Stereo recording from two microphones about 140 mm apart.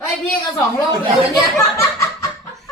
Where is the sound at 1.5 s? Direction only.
20° left (ahead or behind).